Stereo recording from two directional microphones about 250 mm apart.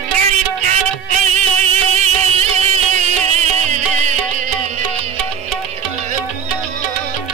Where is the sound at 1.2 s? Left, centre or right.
Right.